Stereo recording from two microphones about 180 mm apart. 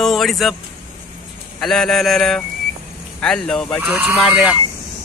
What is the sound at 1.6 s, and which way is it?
Speech, centre (ahead or behind).